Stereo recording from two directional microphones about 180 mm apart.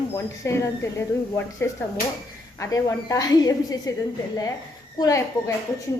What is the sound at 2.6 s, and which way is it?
A woman's voice, 20° left (ahead or behind).